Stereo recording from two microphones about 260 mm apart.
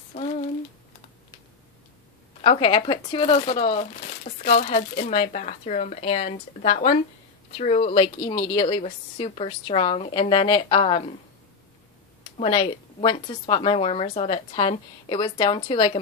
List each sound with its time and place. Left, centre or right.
2.4 s speech: left
12.4 s speech: centre